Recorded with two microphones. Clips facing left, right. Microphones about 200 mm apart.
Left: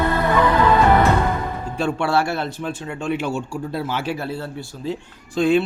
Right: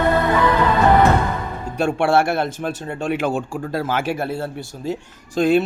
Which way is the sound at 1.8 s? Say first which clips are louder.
Right 3 dB; 50° right (ahead or behind).